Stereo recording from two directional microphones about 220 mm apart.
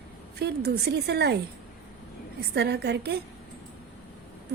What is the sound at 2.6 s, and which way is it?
Speech, 50° right (ahead or behind).